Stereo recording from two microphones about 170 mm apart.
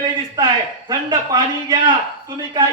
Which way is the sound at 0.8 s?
25° right (ahead or behind).